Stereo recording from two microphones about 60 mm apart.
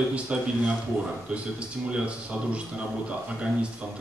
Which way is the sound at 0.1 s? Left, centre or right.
Centre.